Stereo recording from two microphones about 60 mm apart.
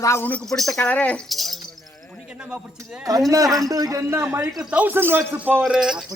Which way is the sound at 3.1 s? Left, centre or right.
Right.